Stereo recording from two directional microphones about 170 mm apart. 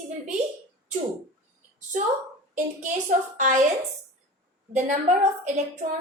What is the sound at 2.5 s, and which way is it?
A woman's voice, 50° right (ahead or behind).